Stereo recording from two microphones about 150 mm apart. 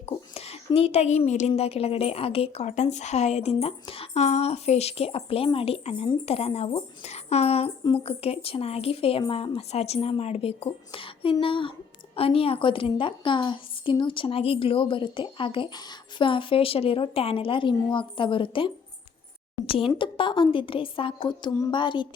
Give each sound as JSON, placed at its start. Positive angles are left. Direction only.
{"t": 0.0, "sound": "a woman's voice", "side_deg": 40}
{"t": 19.9, "sound": "a woman's voice", "side_deg": 35}